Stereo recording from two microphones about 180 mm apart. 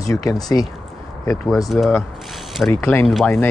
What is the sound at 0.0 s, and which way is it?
Speech, 20° left (ahead or behind).